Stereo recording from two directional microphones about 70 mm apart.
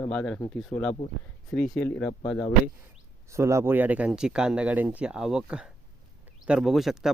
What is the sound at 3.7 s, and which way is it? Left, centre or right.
Speech, right.